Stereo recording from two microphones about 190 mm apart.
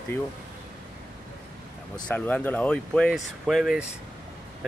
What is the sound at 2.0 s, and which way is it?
Speech, 10° left (ahead or behind).